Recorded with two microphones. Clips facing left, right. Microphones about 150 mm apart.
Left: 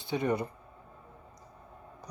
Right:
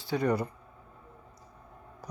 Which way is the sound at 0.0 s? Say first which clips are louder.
Right 2 dB; 20° left (ahead or behind).